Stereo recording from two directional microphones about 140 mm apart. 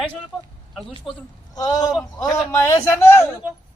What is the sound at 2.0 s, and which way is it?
Speech, 5° left (ahead or behind).